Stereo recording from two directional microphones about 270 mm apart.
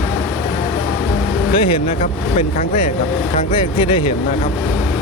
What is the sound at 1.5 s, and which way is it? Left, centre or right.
Speech, centre.